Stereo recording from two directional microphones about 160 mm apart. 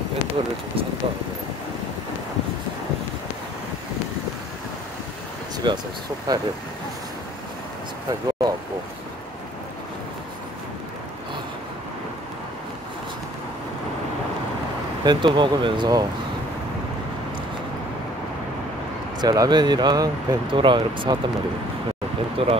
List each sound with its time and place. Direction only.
0.4 s speech: 35° right (ahead or behind)
5.6 s speech: 30° right (ahead or behind)
8.1 s a sound: 25° right (ahead or behind)
15.0 s speech: 30° right (ahead or behind)
19.2 s speech: 25° right (ahead or behind)
22.4 s speech: 35° right (ahead or behind)